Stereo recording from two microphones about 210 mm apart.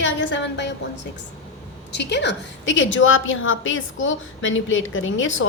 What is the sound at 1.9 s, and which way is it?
A woman's voice, 55° left (ahead or behind).